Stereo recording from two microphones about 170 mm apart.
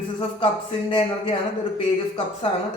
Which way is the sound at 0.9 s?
35° left (ahead or behind).